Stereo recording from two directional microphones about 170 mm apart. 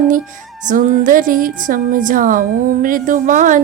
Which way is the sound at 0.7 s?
45° right (ahead or behind).